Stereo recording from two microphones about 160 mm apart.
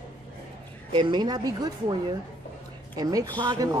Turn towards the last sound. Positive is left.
turn(degrees=-25)  # may be behind; listen again after turning